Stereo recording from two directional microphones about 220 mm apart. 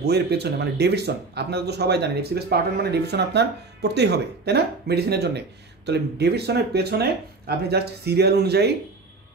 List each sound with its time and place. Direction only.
0.0 s speech: 45° right (ahead or behind)